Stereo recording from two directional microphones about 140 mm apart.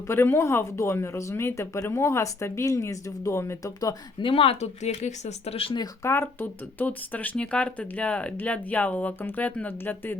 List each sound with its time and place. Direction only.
0.1 s speech: 15° left (ahead or behind)
4.3 s speech: 40° left (ahead or behind)
5.8 s speech: 20° left (ahead or behind)